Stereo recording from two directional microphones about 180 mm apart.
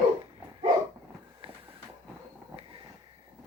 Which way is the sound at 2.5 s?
25° right (ahead or behind).